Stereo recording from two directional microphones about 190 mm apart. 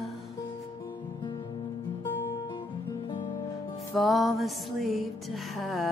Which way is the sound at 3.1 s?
25° left (ahead or behind).